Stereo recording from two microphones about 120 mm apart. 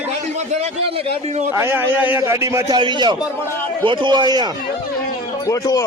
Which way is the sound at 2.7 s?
40° right (ahead or behind).